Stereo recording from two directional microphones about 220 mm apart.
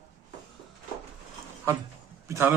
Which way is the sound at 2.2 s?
10° right (ahead or behind).